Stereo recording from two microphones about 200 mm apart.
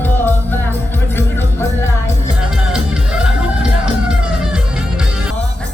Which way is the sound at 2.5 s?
5° right (ahead or behind).